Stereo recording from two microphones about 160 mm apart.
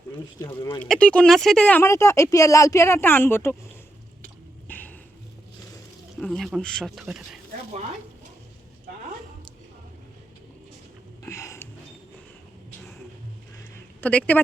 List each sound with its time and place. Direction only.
0.3 s speech: 25° left (ahead or behind)
0.8 s speech: 10° left (ahead or behind)
4.7 s dog: 10° left (ahead or behind)
6.1 s a man's voice: 5° left (ahead or behind)
11.2 s a sound: 20° left (ahead or behind)
13.7 s a sound: 10° left (ahead or behind)